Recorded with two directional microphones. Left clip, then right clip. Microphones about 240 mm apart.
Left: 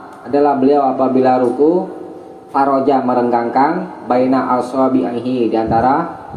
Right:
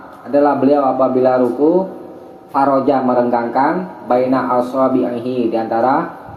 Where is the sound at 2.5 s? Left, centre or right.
Left.